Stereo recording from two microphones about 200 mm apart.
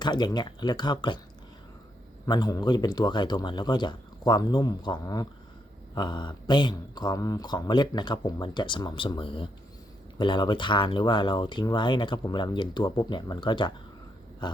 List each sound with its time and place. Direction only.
0.0 s speech: 20° left (ahead or behind)
2.2 s speech: 20° left (ahead or behind)
14.4 s a sound: 20° left (ahead or behind)